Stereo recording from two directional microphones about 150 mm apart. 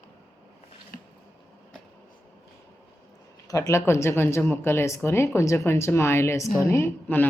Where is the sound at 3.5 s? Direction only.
20° left (ahead or behind).